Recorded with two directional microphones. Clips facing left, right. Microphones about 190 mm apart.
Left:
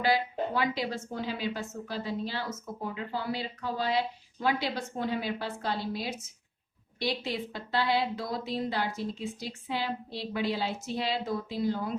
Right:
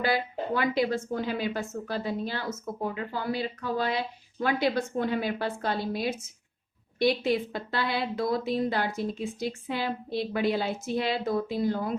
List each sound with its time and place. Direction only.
0.0 s a woman's voice: 50° right (ahead or behind)